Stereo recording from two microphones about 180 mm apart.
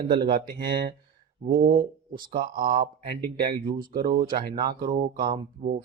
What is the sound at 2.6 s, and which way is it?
Speech, 50° right (ahead or behind).